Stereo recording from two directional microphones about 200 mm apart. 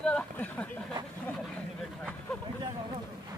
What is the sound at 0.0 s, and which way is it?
Speech, 5° left (ahead or behind).